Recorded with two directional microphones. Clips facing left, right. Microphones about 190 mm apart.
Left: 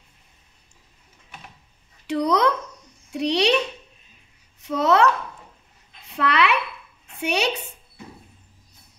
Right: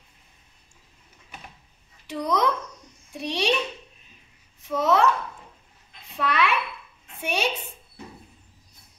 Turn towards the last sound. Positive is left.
turn(degrees=70)  # may be behind; listen again after turning